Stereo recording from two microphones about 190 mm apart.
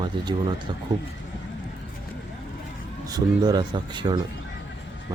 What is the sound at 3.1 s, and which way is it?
Speech, 20° right (ahead or behind).